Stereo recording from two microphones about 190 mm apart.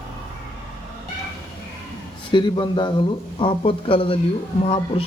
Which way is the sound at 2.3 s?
25° left (ahead or behind).